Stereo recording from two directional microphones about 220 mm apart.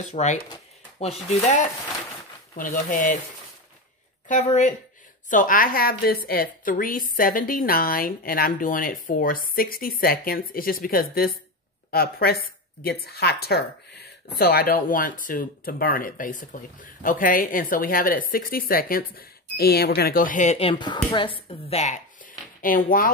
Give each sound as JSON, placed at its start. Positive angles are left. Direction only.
{"t": 0.1, "sound": "a woman's voice", "side_deg": 30}
{"t": 5.3, "sound": "a woman's voice", "side_deg": 35}